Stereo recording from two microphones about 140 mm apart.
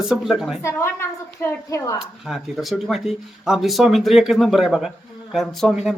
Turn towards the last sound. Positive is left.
turn(degrees=0)  # may be behind; listen again after turning